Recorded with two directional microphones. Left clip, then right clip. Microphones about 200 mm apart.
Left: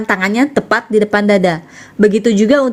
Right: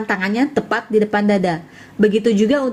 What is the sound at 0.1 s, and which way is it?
Speech, 35° left (ahead or behind).